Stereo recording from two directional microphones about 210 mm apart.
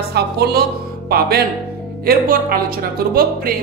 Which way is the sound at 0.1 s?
50° right (ahead or behind).